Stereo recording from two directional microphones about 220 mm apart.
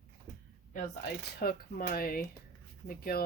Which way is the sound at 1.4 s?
40° left (ahead or behind).